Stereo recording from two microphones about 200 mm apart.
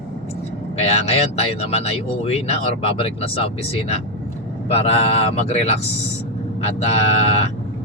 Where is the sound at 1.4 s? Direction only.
30° left (ahead or behind).